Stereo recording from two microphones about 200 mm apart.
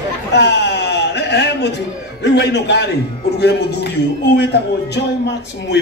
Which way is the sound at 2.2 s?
60° left (ahead or behind).